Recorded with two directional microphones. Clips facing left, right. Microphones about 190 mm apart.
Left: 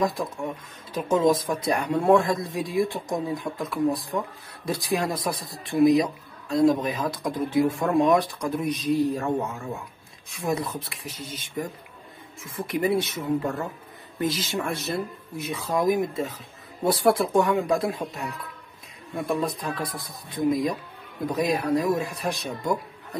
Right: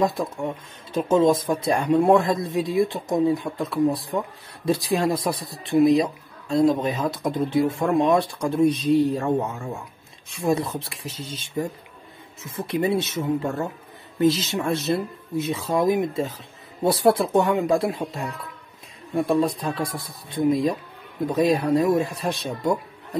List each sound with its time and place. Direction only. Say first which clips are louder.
0.0 s speech: right 3 dB; 25° right (ahead or behind)